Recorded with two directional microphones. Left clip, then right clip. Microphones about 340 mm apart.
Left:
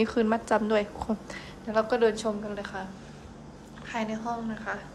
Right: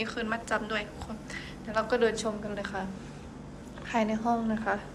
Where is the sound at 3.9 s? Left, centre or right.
Centre.